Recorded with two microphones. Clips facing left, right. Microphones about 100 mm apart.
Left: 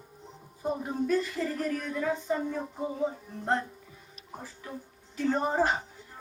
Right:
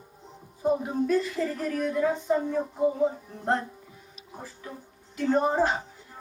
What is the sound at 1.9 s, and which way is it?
Speech, 15° right (ahead or behind).